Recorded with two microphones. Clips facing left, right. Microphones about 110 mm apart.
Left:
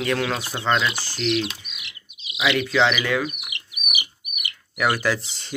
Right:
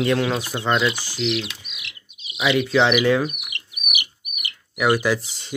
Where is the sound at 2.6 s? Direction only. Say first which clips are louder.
Right 6 dB; 20° right (ahead or behind).